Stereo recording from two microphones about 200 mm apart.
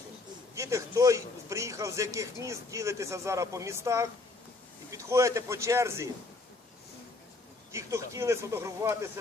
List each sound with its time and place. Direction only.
0.5 s a man's voice: 15° right (ahead or behind)
7.7 s a man's voice: 15° right (ahead or behind)